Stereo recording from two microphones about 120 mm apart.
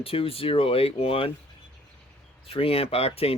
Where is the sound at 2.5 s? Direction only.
50° left (ahead or behind).